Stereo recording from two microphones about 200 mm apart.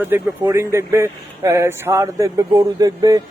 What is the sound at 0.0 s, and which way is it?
A man's voice, 10° right (ahead or behind).